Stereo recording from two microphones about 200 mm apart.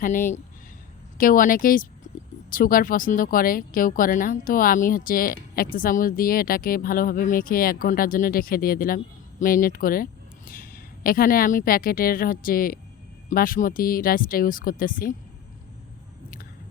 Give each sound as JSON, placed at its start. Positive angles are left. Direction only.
{"t": 0.0, "sound": "a woman's voice", "side_deg": 40}